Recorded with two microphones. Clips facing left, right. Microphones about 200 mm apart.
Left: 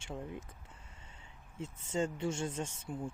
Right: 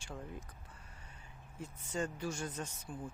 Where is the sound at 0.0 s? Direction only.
25° left (ahead or behind).